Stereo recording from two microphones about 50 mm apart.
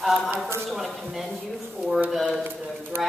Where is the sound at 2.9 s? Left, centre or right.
Right.